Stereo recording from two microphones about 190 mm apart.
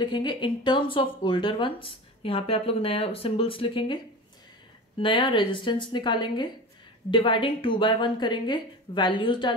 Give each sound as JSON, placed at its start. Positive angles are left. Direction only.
{"t": 0.0, "sound": "speech", "side_deg": 25}